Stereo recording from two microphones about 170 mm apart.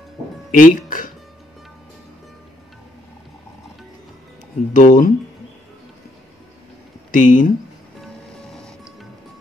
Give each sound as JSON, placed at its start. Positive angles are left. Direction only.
{"t": 0.5, "sound": "speech", "side_deg": 55}
{"t": 4.7, "sound": "speech", "side_deg": 50}
{"t": 7.1, "sound": "speech", "side_deg": 50}
{"t": 8.5, "sound": "music", "side_deg": 5}